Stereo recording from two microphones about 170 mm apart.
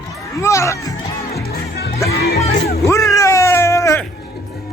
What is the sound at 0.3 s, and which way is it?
Speech, 15° left (ahead or behind).